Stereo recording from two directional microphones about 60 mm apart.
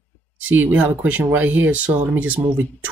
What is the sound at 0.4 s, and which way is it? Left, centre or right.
Speech, right.